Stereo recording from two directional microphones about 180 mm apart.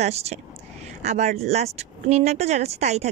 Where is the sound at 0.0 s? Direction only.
35° right (ahead or behind).